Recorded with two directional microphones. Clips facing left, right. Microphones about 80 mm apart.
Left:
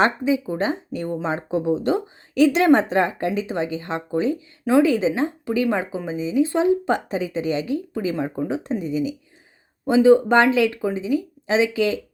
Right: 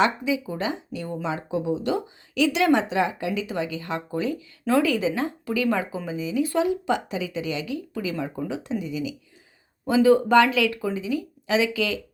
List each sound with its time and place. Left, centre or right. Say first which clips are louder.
0.0 s speech: left 3 dB; left
9.8 s speech: left 4 dB; left